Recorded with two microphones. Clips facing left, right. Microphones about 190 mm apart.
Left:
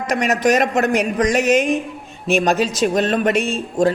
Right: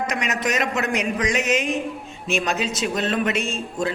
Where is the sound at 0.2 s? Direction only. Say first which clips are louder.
Left 12 dB; 55° left (ahead or behind).